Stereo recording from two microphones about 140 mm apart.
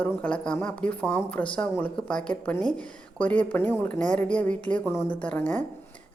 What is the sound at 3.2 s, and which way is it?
A woman's voice, 10° left (ahead or behind).